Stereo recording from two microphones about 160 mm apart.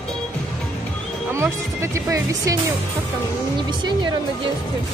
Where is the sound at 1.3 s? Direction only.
15° right (ahead or behind).